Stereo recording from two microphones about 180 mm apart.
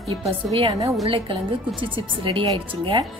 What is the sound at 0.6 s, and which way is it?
Speech, 25° right (ahead or behind).